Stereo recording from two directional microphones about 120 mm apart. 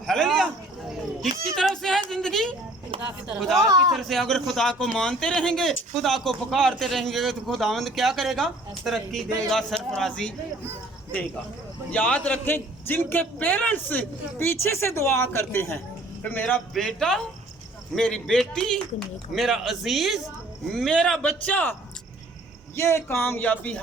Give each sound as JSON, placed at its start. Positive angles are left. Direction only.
{"t": 0.0, "sound": "a sound", "side_deg": 5}
{"t": 1.5, "sound": "yodeling", "side_deg": 5}
{"t": 2.0, "sound": "a sound", "side_deg": 5}
{"t": 3.6, "sound": "speech", "side_deg": -30}
{"t": 3.9, "sound": "a man's voice", "side_deg": 0}
{"t": 11.9, "sound": "a man's voice", "side_deg": 10}